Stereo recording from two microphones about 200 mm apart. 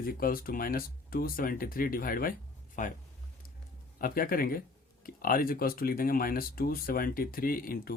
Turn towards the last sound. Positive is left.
turn(degrees=45)  # may be behind; listen again after turning